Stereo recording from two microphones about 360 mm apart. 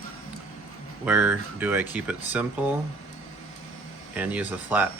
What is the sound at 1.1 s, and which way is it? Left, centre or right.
Speech, centre.